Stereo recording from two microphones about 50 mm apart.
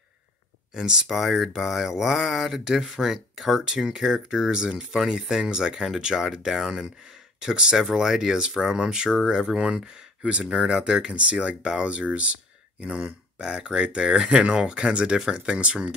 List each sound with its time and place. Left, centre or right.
0.7 s speech: centre
1.0 s speech: centre